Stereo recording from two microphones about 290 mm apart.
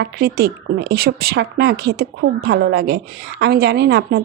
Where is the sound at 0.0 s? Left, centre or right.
Right.